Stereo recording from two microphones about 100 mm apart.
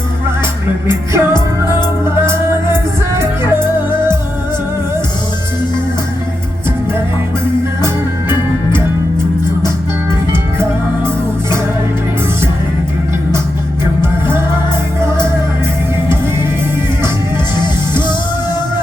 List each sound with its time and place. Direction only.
0.9 s music: 25° right (ahead or behind)
3.5 s music: 25° right (ahead or behind)
14.0 s music: 25° right (ahead or behind)